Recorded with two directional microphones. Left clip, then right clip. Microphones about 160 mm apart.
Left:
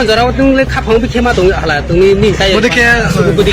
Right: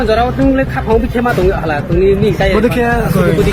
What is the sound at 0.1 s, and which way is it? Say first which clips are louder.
Speech: even; 60° left (ahead or behind).